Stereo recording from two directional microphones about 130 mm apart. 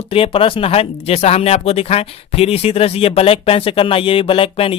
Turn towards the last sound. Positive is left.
turn(degrees=45)  # may be behind; listen again after turning